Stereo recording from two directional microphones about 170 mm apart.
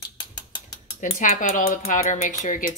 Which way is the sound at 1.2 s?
50° left (ahead or behind).